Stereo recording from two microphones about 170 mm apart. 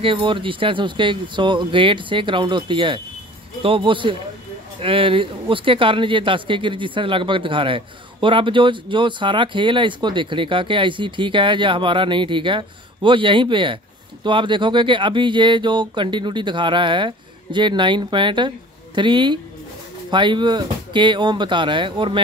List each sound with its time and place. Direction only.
0.0 s speech: 30° right (ahead or behind)